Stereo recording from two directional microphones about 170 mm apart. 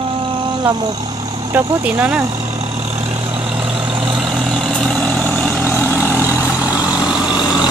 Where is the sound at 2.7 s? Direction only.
35° right (ahead or behind).